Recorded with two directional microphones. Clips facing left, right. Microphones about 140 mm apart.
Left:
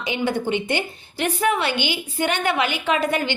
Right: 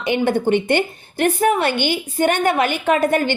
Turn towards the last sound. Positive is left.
turn(degrees=-45)  # may be behind; listen again after turning